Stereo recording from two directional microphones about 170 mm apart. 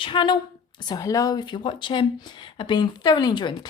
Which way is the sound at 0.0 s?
30° left (ahead or behind).